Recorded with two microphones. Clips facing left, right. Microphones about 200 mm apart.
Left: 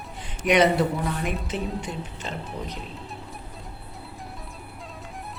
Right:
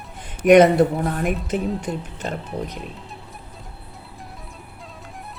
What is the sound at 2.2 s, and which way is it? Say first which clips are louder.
Speech: right 6 dB; 50° right (ahead or behind).